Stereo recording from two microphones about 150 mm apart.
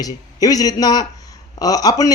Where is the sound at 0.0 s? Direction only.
25° left (ahead or behind).